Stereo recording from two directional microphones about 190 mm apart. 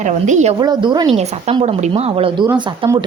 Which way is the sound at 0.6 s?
20° right (ahead or behind).